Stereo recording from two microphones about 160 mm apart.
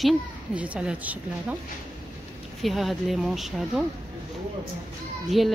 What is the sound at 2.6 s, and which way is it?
Speech, centre (ahead or behind).